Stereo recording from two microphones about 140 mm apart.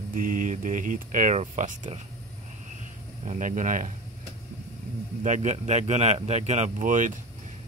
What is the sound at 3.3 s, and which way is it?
Speech, 65° right (ahead or behind).